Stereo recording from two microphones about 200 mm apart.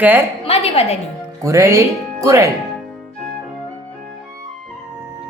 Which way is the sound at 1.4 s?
15° right (ahead or behind).